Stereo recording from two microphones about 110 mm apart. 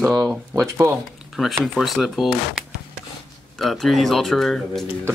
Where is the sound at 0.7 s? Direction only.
25° right (ahead or behind).